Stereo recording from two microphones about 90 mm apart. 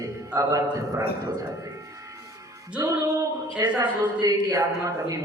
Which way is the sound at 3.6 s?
40° right (ahead or behind).